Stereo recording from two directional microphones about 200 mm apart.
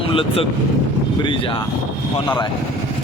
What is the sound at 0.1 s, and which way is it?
Speech, 25° left (ahead or behind).